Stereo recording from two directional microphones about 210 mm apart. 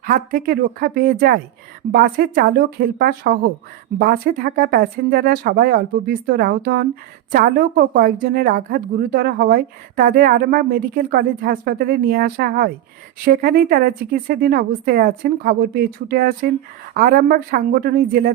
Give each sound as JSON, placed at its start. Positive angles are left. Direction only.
{"t": 0.0, "sound": "speech", "side_deg": -40}